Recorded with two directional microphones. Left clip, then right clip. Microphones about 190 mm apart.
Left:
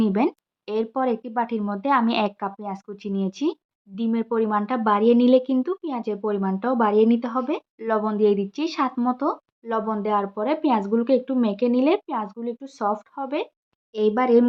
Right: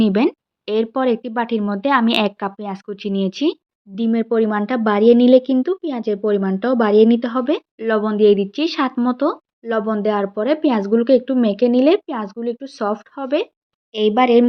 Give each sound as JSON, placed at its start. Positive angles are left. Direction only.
{"t": 0.0, "sound": "speech", "side_deg": -20}
{"t": 7.8, "sound": "speech", "side_deg": -15}